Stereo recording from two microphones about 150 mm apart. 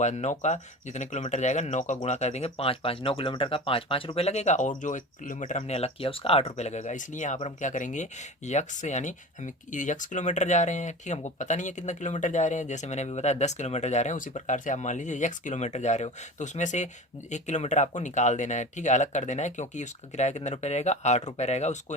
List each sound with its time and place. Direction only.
0.0 s speech: 50° left (ahead or behind)